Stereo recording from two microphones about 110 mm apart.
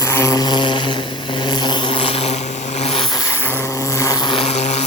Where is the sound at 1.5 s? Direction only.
40° left (ahead or behind); by 2.3 s 60° left (ahead or behind).